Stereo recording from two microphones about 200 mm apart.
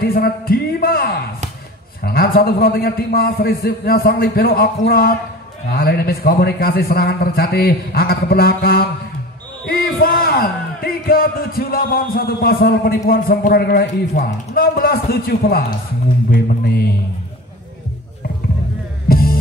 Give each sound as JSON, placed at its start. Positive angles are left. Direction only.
{"t": 0.0, "sound": "speech", "side_deg": 50}
{"t": 19.0, "sound": "music", "side_deg": 50}